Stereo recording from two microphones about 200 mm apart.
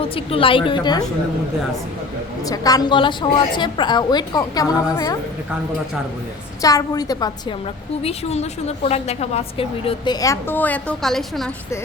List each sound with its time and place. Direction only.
0.0 s a woman's voice: 25° left (ahead or behind)
2.5 s a woman's voice: 20° left (ahead or behind)
6.6 s a woman's voice: 15° left (ahead or behind)
8.0 s a woman's voice: 30° left (ahead or behind); by 11.4 s centre (ahead or behind)